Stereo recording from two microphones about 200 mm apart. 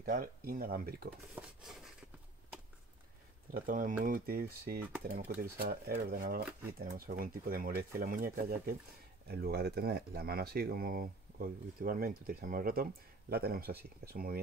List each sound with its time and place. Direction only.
0.0 s speech: 45° right (ahead or behind)
1.3 s dishes: centre (ahead or behind)
3.5 s speech: 45° right (ahead or behind)